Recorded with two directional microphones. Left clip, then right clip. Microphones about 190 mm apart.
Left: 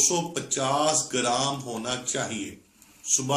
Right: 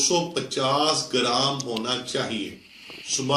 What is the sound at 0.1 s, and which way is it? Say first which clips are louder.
Speech: right 4 dB; 25° left (ahead or behind).